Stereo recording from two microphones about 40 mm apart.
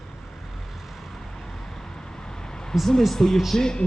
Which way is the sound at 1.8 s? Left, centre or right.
Centre.